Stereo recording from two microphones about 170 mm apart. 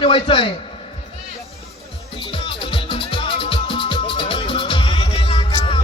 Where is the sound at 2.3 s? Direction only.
30° left (ahead or behind).